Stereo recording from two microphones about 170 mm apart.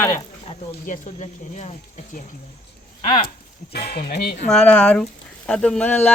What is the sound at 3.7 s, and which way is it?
Speech, 70° left (ahead or behind).